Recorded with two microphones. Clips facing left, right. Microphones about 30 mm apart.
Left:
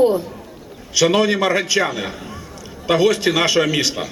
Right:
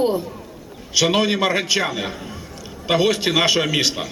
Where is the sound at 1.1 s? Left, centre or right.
Centre.